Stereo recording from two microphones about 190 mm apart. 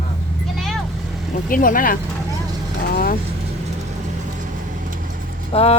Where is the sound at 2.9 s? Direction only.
50° left (ahead or behind).